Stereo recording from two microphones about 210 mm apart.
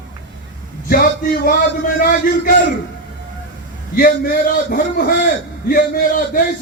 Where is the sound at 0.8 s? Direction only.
45° left (ahead or behind).